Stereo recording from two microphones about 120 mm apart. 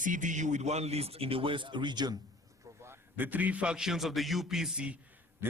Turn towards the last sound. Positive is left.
turn(degrees=-10)  # may be behind; listen again after turning